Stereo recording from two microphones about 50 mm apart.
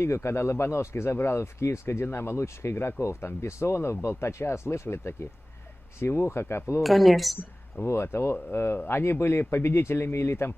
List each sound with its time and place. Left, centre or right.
0.0 s speech: left
2.0 s speech: left
6.8 s speech: centre
7.8 s speech: left